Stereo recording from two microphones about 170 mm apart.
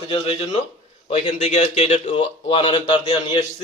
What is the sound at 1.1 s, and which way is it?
Speech, 35° left (ahead or behind).